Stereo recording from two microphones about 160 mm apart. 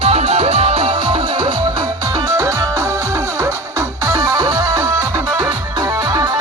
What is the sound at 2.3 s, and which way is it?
Music, 20° right (ahead or behind).